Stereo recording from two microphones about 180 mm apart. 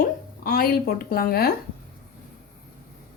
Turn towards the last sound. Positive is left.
turn(degrees=60)  # may be behind; listen again after turning